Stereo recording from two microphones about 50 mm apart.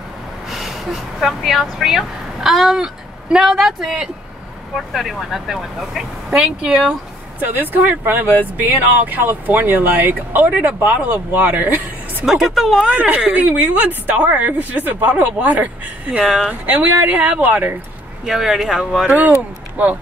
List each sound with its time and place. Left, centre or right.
0.5 s speech: centre
4.9 s speech: centre
7.3 s speech: right
12.3 s speech: centre
12.9 s speech: right
18.2 s speech: centre